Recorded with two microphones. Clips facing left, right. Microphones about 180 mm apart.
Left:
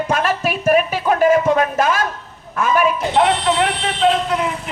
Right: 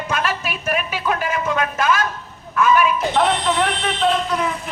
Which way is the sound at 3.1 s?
20° left (ahead or behind).